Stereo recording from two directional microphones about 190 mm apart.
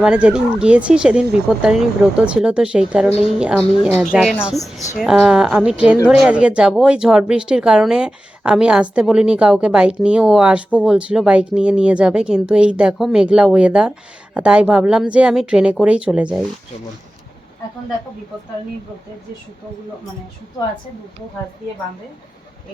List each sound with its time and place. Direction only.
0.0 s speech: 5° right (ahead or behind)
4.6 s a woman's voice: 15° left (ahead or behind)
4.9 s speech: centre (ahead or behind)